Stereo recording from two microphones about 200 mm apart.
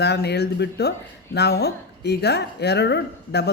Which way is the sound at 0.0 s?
55° left (ahead or behind).